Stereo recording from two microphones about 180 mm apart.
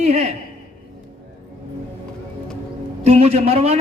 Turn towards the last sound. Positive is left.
turn(degrees=-35)  # may be behind; listen again after turning